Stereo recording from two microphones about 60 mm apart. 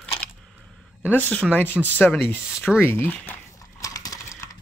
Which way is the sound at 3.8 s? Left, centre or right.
Left.